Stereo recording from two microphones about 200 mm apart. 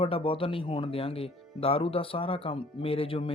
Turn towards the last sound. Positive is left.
turn(degrees=30)  # may be behind; listen again after turning